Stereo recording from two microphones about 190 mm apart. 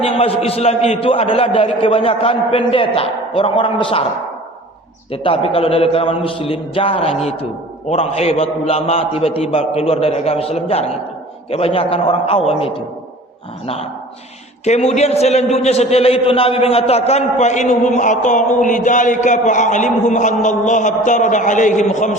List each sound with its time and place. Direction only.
0.0 s a man's voice: 30° left (ahead or behind)
5.1 s a man's voice: 30° left (ahead or behind)
14.6 s a man's voice: 35° left (ahead or behind)